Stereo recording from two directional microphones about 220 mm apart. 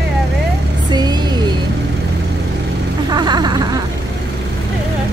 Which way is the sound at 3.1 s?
20° right (ahead or behind).